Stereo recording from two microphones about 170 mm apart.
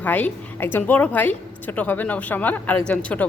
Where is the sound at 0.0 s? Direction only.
10° left (ahead or behind).